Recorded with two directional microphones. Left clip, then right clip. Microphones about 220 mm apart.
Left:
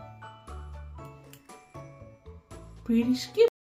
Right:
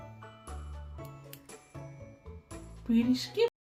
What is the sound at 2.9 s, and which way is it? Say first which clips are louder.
Speech: left 2 dB; 25° left (ahead or behind).